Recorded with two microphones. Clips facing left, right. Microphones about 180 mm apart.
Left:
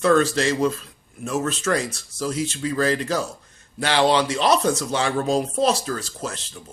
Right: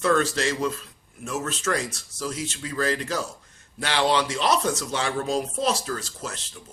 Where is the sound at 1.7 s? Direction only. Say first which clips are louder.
Left 4 dB; 40° left (ahead or behind).